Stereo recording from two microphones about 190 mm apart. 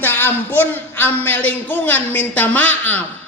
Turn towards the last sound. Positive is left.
turn(degrees=10)  # may be behind; listen again after turning